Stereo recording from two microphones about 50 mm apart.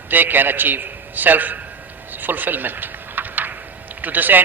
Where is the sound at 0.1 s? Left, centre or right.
Right.